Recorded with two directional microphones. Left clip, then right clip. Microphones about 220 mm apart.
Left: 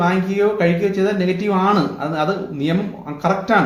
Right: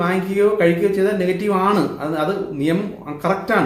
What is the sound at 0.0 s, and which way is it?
Speech, 5° right (ahead or behind).